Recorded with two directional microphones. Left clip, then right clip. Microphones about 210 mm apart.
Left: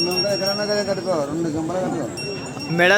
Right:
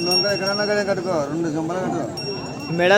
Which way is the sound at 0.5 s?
20° left (ahead or behind).